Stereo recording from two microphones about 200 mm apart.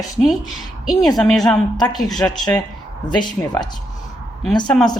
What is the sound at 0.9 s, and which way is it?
Speech, centre (ahead or behind).